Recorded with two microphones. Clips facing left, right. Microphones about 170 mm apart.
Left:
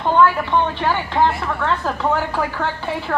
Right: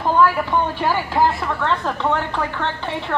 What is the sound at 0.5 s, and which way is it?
Speech, 10° right (ahead or behind).